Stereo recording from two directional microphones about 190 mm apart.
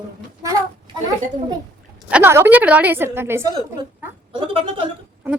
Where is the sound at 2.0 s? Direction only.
10° right (ahead or behind).